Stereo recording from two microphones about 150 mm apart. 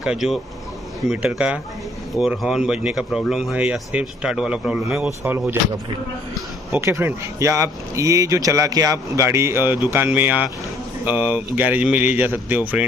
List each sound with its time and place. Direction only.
0.0 s speech: 5° right (ahead or behind)
6.7 s speech: 15° right (ahead or behind)